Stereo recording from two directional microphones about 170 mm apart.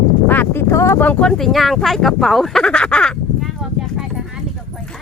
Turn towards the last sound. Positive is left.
turn(degrees=0)  # may be behind; listen again after turning